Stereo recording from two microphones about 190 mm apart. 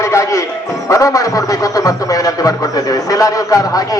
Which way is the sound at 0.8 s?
15° left (ahead or behind).